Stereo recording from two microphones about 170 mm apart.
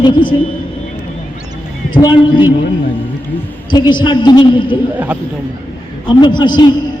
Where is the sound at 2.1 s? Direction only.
30° left (ahead or behind).